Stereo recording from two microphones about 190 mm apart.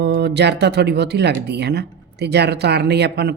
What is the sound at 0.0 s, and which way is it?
Speech, 60° right (ahead or behind).